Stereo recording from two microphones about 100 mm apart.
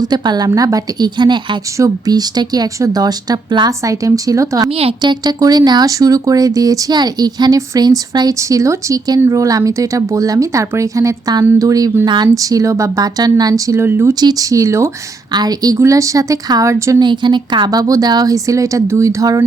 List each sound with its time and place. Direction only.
0.1 s a woman's voice: 45° right (ahead or behind)
12.0 s a woman's voice: 50° right (ahead or behind)
12.3 s speech: 35° right (ahead or behind)
13.7 s speech: 25° right (ahead or behind)
14.1 s speech: 40° right (ahead or behind)
15.3 s speech: 40° right (ahead or behind)
17.0 s speech: 50° right (ahead or behind); by 19.4 s 35° right (ahead or behind)